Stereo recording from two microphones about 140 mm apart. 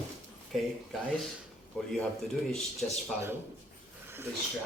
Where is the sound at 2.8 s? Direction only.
5° left (ahead or behind).